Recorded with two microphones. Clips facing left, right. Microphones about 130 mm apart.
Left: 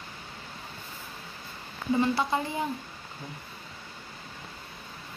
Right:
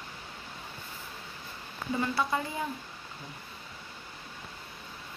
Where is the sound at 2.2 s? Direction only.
20° left (ahead or behind).